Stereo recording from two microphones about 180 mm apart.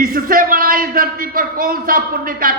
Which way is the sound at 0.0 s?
50° right (ahead or behind).